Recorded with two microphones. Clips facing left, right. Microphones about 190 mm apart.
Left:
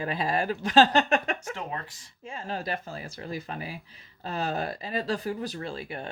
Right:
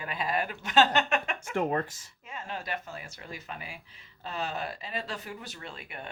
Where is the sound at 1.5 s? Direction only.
45° right (ahead or behind).